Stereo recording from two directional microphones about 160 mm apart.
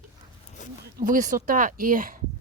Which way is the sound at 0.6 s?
50° left (ahead or behind).